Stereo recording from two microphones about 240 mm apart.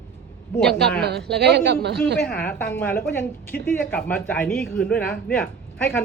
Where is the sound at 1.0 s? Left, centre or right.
Right.